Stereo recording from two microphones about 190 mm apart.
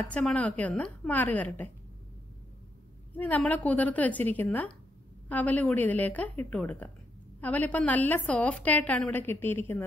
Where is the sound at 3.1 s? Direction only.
10° left (ahead or behind).